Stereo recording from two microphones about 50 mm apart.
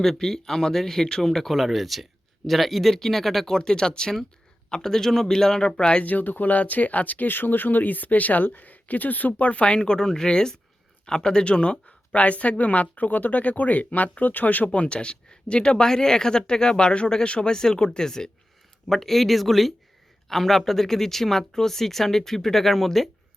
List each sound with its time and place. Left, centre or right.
0.0 s speech: centre
6.0 s speech: left; by 23.0 s centre